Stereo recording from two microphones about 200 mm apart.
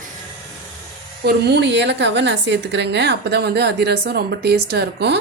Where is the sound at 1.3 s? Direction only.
55° right (ahead or behind).